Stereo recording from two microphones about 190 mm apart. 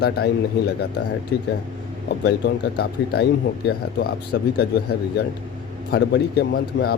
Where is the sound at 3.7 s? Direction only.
55° left (ahead or behind).